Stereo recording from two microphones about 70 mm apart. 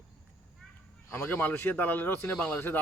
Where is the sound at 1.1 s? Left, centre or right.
Left.